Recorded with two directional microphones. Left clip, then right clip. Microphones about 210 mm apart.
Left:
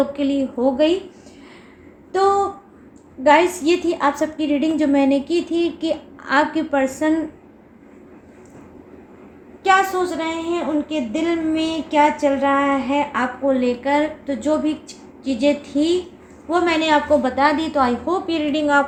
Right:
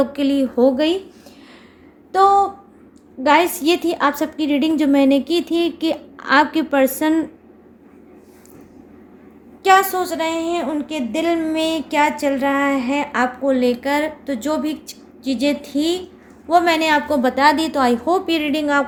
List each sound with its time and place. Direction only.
0.0 s a woman's voice: 55° right (ahead or behind)
3.2 s a woman's voice: 50° right (ahead or behind)
9.6 s a woman's voice: 50° right (ahead or behind)